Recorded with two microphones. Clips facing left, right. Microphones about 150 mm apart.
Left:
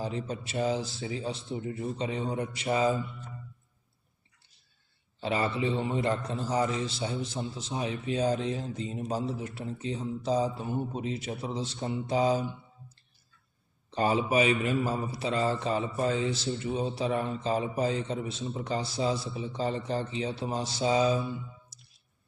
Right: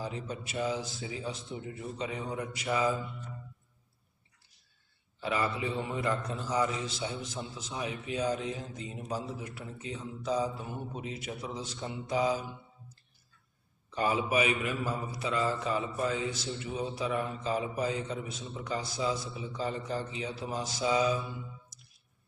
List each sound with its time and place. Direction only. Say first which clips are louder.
0.0 s a man's voice: left 4 dB; 30° left (ahead or behind)
5.2 s a man's voice: left 3 dB; 30° left (ahead or behind)
13.9 s a man's voice: left 3 dB; 30° left (ahead or behind)
21.7 s music: left 1 dB; 30° left (ahead or behind)